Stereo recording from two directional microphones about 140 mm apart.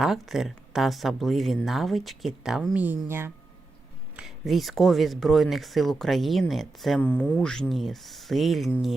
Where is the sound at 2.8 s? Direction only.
15° right (ahead or behind).